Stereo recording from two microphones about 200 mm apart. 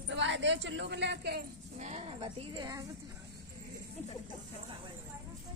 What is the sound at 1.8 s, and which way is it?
A woman's voice, 30° right (ahead or behind).